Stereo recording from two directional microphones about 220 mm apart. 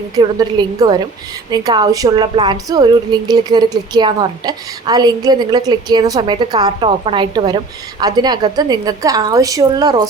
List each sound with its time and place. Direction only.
0.2 s a woman's voice: 15° right (ahead or behind)